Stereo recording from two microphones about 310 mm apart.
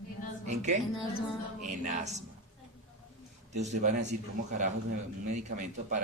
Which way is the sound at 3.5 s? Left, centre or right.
Right.